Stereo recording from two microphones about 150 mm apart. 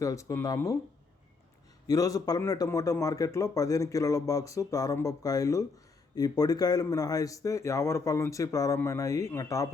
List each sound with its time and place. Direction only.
0.0 s speech: 20° left (ahead or behind)
1.9 s speech: 25° left (ahead or behind)